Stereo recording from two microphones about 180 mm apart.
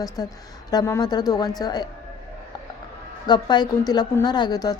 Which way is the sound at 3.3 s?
25° left (ahead or behind).